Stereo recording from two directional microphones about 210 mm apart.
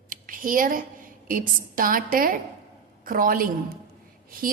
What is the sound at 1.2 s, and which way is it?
A woman's voice, 40° right (ahead or behind).